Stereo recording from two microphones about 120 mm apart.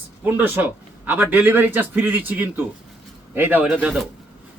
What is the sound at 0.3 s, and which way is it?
Speech, 15° right (ahead or behind).